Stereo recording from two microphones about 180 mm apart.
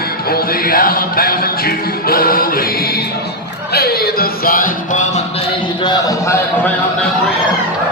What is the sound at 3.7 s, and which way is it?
Music, 60° left (ahead or behind).